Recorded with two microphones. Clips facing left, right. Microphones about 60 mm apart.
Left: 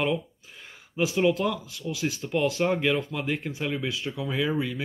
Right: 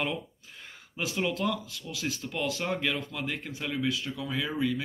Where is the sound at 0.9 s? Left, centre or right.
Centre.